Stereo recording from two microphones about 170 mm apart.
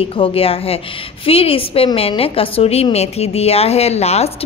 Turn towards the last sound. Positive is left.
turn(degrees=40)  # may be behind; listen again after turning